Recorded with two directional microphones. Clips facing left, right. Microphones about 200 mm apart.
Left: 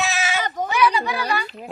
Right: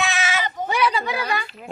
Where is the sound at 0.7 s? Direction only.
25° right (ahead or behind).